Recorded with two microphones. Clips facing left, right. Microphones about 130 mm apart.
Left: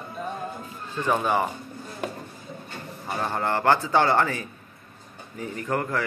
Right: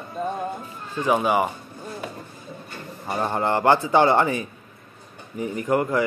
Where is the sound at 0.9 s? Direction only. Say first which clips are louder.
Right 3 dB; 10° right (ahead or behind).